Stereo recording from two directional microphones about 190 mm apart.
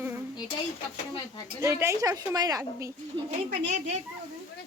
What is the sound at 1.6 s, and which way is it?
A woman's voice, 15° right (ahead or behind).